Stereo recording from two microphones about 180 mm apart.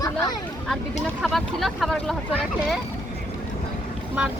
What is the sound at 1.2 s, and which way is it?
Speech, centre (ahead or behind).